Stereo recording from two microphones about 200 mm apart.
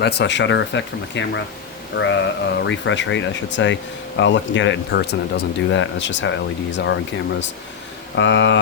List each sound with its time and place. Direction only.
0.0 s speech: 55° left (ahead or behind)
8.1 s speech: 65° left (ahead or behind)